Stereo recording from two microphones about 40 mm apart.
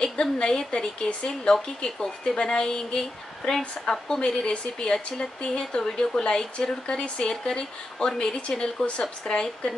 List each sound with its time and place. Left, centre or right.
0.0 s a woman's voice: centre
9.0 s speech: centre